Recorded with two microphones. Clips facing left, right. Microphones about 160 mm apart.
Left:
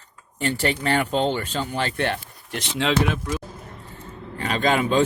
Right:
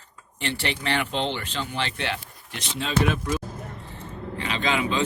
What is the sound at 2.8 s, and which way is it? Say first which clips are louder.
Speech: left 8 dB; 85° left.